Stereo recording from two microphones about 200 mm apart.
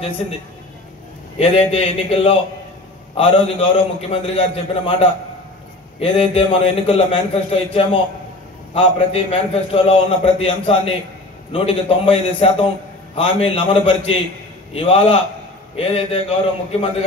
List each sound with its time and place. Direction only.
1.4 s a man's voice: 30° left (ahead or behind)